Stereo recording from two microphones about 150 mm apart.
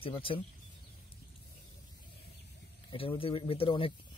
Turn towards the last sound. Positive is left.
turn(degrees=35)  # may be behind; listen again after turning